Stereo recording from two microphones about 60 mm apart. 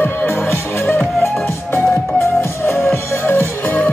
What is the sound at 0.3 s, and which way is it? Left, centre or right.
Music, left.